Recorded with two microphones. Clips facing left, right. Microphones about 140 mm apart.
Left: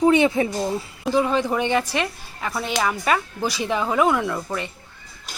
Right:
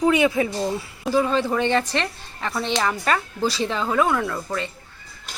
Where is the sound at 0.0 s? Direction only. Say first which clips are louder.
Left 2 dB; 25° left (ahead or behind).